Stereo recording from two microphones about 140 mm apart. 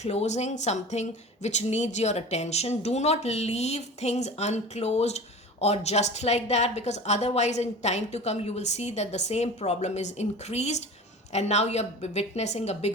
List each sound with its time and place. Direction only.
0.0 s speech: 50° left (ahead or behind)